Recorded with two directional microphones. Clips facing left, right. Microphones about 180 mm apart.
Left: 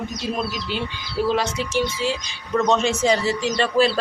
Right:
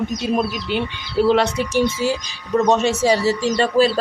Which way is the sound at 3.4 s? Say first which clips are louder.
Right 2 dB; 40° right (ahead or behind).